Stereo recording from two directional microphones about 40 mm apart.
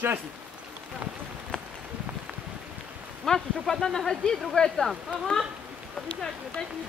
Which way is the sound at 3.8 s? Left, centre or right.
Centre.